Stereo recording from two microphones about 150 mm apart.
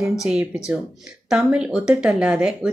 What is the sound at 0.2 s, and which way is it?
Speech, 5° right (ahead or behind).